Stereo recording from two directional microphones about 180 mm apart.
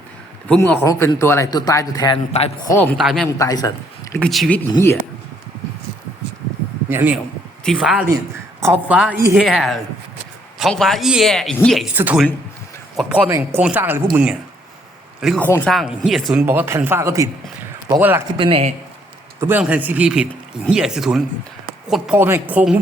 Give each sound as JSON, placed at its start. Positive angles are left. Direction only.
{"t": 0.4, "sound": "speech", "side_deg": 5}
{"t": 2.3, "sound": "a man's voice", "side_deg": 40}
{"t": 2.8, "sound": "speech", "side_deg": 0}
{"t": 3.2, "sound": "speech", "side_deg": 20}
{"t": 4.2, "sound": "speech", "side_deg": 0}
{"t": 4.7, "sound": "speech", "side_deg": 15}
{"t": 6.9, "sound": "speech", "side_deg": -10}
{"t": 7.6, "sound": "speech", "side_deg": 5}
{"t": 11.9, "sound": "speech", "side_deg": -10}
{"t": 15.4, "sound": "speech", "side_deg": 10}
{"t": 16.5, "sound": "speech", "side_deg": -15}
{"t": 18.3, "sound": "speech", "side_deg": -30}
{"t": 19.4, "sound": "speech", "side_deg": -10}